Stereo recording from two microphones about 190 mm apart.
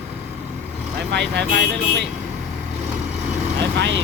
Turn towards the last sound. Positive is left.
turn(degrees=-70)  # may be behind; listen again after turning